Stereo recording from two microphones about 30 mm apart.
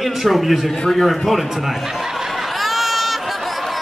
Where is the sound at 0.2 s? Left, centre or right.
Centre.